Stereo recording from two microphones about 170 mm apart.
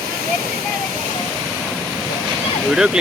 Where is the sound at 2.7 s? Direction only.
5° right (ahead or behind).